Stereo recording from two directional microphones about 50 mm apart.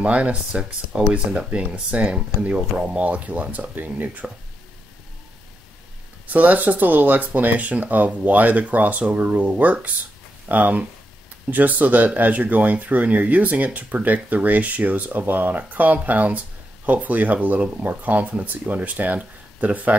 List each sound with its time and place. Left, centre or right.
0.0 s speech: right
6.2 s speech: right